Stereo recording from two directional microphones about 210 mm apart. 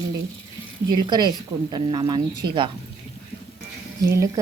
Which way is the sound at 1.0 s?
20° right (ahead or behind).